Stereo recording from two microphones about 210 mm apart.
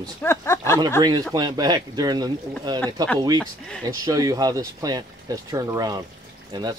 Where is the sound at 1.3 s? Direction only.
20° right (ahead or behind).